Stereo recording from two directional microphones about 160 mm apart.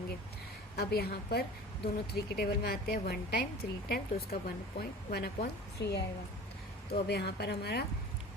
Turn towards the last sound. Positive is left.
turn(degrees=90)